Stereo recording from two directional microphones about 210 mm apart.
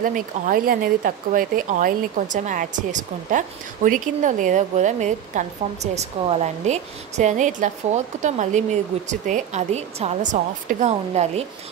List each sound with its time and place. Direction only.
0.0 s speech: 40° right (ahead or behind)